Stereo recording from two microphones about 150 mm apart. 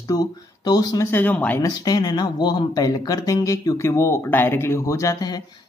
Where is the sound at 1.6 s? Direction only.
25° left (ahead or behind).